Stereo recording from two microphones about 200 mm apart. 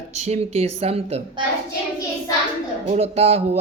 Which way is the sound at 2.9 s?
30° right (ahead or behind).